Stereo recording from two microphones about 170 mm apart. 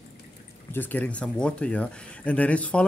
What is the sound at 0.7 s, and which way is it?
Speech, 10° left (ahead or behind).